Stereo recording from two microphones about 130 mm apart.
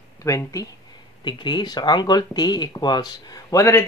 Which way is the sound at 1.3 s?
35° left (ahead or behind).